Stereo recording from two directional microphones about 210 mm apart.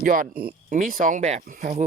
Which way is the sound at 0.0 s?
40° right (ahead or behind).